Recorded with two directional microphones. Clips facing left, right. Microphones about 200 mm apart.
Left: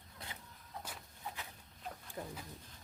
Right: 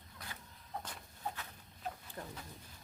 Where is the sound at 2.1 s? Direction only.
10° left (ahead or behind).